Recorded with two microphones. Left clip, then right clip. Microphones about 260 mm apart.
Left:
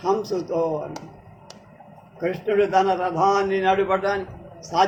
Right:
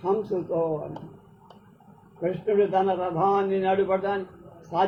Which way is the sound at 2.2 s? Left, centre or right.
Left.